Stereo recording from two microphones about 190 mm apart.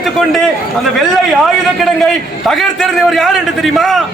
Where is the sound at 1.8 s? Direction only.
Centre (ahead or behind).